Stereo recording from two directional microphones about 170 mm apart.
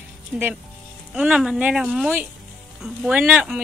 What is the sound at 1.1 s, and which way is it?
Speech, 5° right (ahead or behind).